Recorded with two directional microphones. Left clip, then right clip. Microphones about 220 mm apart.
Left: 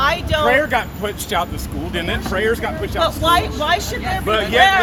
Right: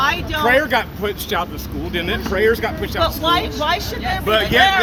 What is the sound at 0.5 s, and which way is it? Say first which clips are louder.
Speech: right 4 dB; 30° right (ahead or behind).